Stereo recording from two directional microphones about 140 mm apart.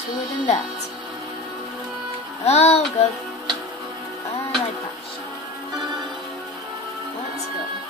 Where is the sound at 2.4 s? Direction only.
50° left (ahead or behind).